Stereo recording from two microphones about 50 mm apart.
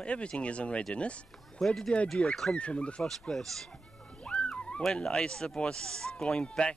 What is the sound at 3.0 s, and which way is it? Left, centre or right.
Speech, centre.